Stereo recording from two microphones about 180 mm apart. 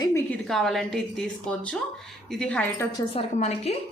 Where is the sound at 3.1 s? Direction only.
35° left (ahead or behind).